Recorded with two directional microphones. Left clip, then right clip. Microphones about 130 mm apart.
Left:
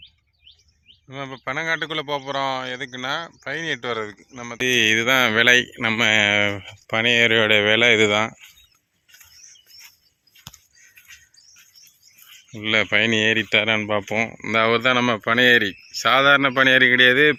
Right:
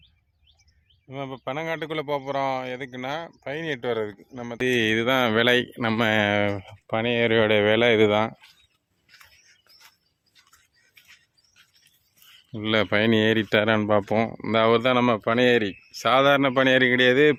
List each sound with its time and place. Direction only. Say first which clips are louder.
1.1 s speech: left 3 dB; 10° right (ahead or behind)
3.8 s speech: even; 30° right (ahead or behind)
4.5 s speech: left 5 dB; 20° right (ahead or behind)
12.6 s speech: left 3 dB; 35° right (ahead or behind)
14.3 s speech: left 1 dB; 25° right (ahead or behind)